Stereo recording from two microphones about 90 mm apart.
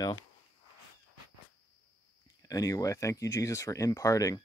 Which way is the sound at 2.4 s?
40° left (ahead or behind).